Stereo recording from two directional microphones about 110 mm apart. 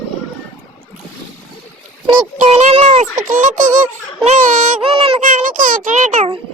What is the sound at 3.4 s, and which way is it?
Speech, 90° right.